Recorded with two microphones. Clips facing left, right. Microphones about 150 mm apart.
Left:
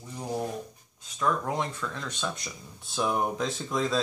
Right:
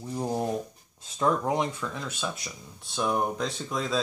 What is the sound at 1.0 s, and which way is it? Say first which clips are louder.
Speech: right 3 dB; 25° right (ahead or behind).